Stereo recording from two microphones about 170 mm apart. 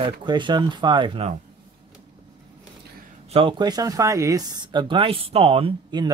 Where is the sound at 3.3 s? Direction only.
35° right (ahead or behind).